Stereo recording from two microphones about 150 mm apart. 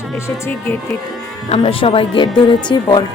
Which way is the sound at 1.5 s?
40° left (ahead or behind).